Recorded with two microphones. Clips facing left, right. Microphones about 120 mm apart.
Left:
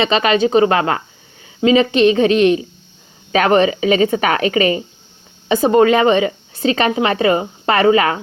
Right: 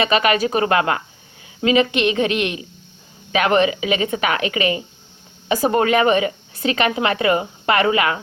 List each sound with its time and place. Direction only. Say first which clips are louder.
0.0 s a woman's voice: left 3 dB; 30° left (ahead or behind)